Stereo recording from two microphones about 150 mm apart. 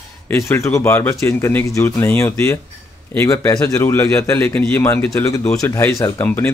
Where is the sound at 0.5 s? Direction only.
20° left (ahead or behind).